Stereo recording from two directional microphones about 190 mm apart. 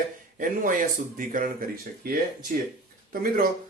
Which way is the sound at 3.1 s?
50° right (ahead or behind).